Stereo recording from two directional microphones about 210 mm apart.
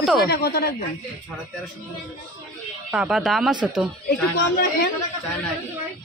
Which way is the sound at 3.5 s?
20° right (ahead or behind).